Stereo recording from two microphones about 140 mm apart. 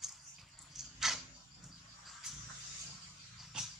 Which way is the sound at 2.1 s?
5° right (ahead or behind).